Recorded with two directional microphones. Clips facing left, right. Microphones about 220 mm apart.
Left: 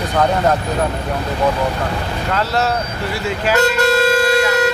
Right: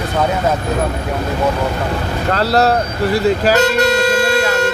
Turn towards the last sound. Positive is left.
turn(degrees=-40)  # may be behind; listen again after turning